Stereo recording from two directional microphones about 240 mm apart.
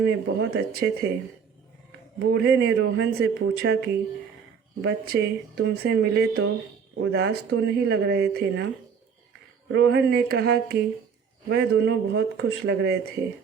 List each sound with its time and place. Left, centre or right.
0.0 s speech: right
2.1 s speech: right
9.7 s speech: right